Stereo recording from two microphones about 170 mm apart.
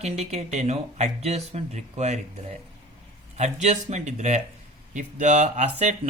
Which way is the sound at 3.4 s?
40° right (ahead or behind).